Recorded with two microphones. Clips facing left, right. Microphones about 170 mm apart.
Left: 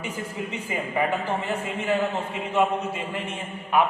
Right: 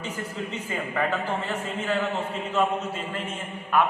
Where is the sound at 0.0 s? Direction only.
10° left (ahead or behind).